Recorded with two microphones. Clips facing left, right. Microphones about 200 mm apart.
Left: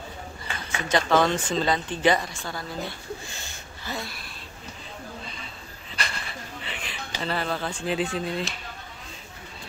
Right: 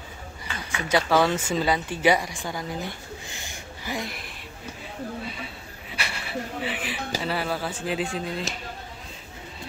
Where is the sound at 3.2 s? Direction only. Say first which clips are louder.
Right 2 dB; 15° right (ahead or behind).